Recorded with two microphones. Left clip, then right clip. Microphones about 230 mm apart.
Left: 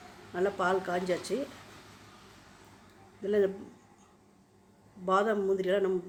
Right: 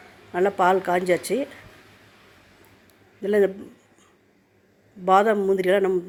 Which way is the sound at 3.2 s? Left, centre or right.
Right.